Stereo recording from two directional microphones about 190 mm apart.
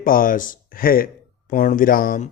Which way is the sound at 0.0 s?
45° left (ahead or behind).